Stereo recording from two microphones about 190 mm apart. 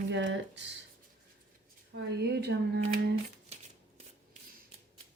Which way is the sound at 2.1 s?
60° right (ahead or behind).